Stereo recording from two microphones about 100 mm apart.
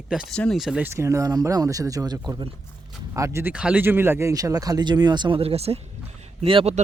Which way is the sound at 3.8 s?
20° right (ahead or behind).